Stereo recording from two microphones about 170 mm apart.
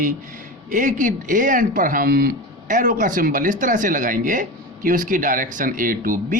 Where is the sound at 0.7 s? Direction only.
50° right (ahead or behind).